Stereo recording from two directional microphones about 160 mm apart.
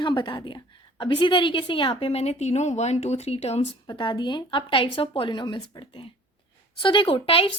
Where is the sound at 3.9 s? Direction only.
30° left (ahead or behind).